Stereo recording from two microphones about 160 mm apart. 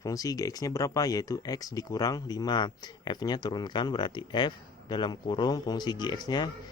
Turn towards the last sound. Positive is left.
turn(degrees=25)  # may be behind; listen again after turning